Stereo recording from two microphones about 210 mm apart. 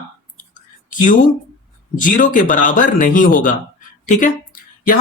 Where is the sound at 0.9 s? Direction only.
40° left (ahead or behind).